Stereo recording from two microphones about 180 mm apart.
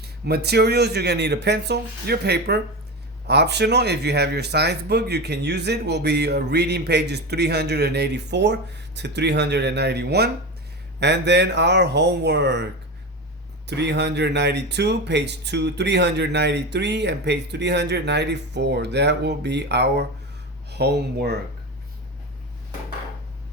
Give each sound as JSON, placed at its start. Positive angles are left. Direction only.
{"t": 0.0, "sound": "speech", "side_deg": -65}
{"t": 13.7, "sound": "speech", "side_deg": -70}